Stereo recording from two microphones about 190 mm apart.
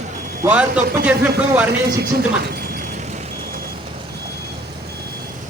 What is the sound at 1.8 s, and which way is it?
A woman's voice, 55° right (ahead or behind).